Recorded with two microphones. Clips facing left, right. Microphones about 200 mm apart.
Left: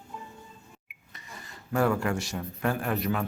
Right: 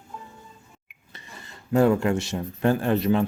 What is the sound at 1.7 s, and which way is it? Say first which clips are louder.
Speech: right 6 dB; 25° right (ahead or behind).